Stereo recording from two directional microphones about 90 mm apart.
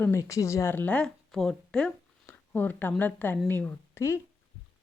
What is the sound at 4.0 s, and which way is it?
Speech, 30° left (ahead or behind).